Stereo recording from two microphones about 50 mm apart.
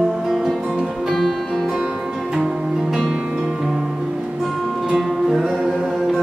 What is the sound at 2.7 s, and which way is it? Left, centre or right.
Music, centre.